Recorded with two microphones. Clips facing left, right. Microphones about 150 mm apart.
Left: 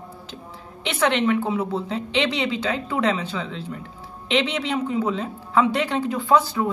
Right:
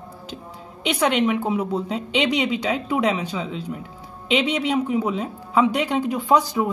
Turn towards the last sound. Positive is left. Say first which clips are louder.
# even
turn(degrees=-15)  # may be behind; listen again after turning